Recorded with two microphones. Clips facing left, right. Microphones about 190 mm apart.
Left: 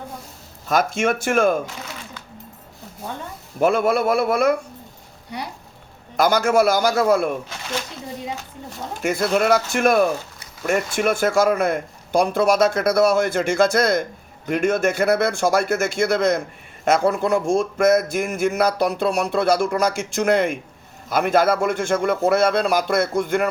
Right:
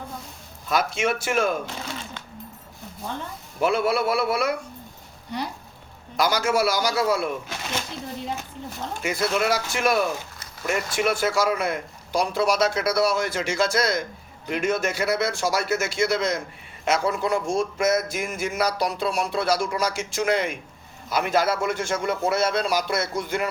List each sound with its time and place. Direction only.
0.7 s speech: 50° left (ahead or behind)
3.6 s speech: 50° left (ahead or behind)
6.1 s speech: 50° left (ahead or behind)
9.0 s speech: 50° left (ahead or behind)